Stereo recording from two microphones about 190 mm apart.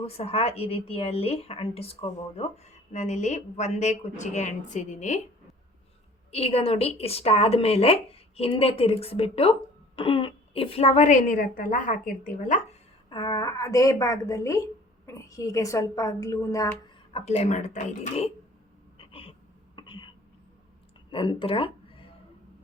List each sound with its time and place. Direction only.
0.0 s speech: 30° left (ahead or behind)
6.3 s speech: 30° left (ahead or behind)
13.1 s a woman's voice: 25° left (ahead or behind)
17.1 s speech: 30° left (ahead or behind)
18.9 s a sound: 30° left (ahead or behind)
19.7 s throat clearing: 25° left (ahead or behind)
21.1 s a sound: 25° left (ahead or behind)